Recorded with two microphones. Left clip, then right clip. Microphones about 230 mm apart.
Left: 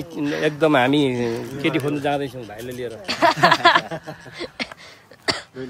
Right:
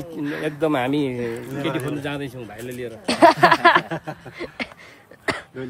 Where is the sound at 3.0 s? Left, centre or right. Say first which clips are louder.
Right 2 dB; centre.